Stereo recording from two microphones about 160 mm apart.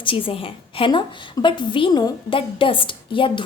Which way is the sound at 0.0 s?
35° left (ahead or behind).